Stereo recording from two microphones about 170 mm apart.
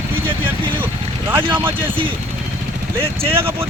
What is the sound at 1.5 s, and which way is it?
Speech, 15° right (ahead or behind).